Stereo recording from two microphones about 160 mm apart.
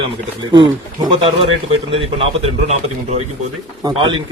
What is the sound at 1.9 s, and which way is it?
Speech, 35° right (ahead or behind).